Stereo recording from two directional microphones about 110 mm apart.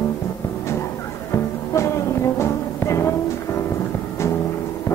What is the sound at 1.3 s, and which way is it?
Music, 25° left (ahead or behind).